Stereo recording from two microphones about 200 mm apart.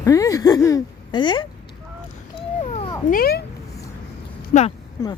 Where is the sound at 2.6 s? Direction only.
30° left (ahead or behind).